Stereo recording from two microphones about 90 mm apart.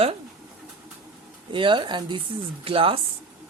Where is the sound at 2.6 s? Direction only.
90° right.